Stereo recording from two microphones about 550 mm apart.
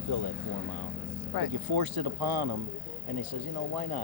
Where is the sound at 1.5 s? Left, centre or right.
Right.